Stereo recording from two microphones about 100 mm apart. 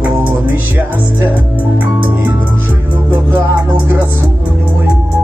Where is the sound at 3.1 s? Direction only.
20° right (ahead or behind).